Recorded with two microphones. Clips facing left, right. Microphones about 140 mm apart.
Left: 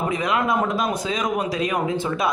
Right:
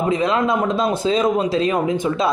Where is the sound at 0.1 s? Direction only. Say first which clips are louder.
Right 4 dB; 25° right (ahead or behind).